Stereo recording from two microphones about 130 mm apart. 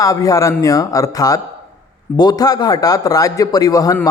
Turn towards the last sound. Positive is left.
turn(degrees=30)  # may be behind; listen again after turning